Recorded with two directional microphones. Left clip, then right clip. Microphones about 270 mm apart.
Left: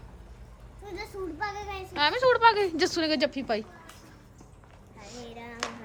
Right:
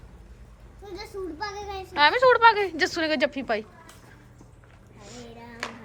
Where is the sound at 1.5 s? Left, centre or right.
Centre.